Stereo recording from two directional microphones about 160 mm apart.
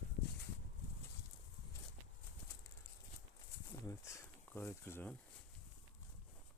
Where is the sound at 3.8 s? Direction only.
20° left (ahead or behind).